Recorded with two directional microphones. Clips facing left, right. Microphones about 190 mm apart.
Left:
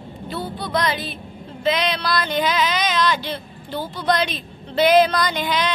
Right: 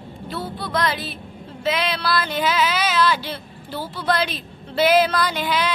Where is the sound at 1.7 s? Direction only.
5° right (ahead or behind).